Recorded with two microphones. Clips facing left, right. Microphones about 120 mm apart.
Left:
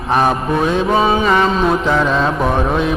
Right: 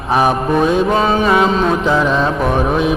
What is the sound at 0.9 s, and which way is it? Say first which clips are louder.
Music: even; 5° left (ahead or behind).